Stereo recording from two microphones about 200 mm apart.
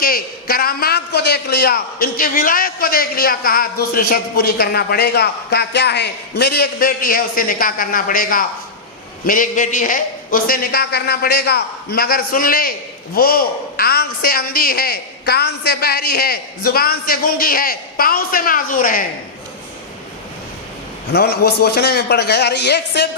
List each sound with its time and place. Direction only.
0.0 s a man's voice: 45° left (ahead or behind)
21.1 s a man's voice: 55° left (ahead or behind)